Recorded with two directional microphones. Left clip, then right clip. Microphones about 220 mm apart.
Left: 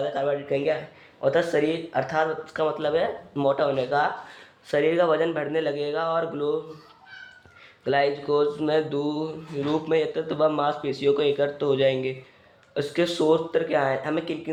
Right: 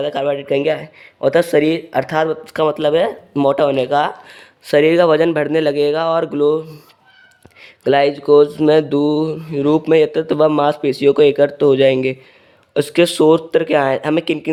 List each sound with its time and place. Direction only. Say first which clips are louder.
0.0 s speech: right 7 dB; 45° right (ahead or behind)
7.6 s speech: right 9 dB; 55° right (ahead or behind)